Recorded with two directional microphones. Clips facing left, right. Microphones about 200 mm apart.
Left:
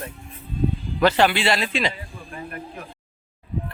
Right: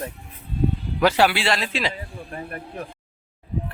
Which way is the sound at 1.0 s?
10° right (ahead or behind).